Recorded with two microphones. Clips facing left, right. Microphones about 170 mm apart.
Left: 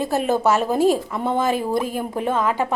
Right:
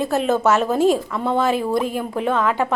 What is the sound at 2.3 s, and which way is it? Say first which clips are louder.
Speech: right 1 dB; 15° left (ahead or behind).